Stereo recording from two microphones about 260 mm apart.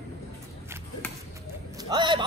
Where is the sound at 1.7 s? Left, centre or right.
Centre.